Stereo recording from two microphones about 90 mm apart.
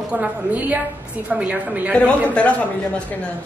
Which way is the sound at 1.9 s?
15° left (ahead or behind).